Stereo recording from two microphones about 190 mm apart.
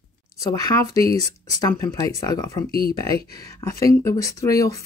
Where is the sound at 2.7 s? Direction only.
55° left (ahead or behind).